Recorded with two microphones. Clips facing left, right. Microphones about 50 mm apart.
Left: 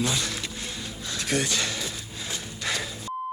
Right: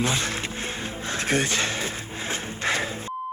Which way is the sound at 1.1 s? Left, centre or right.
Right.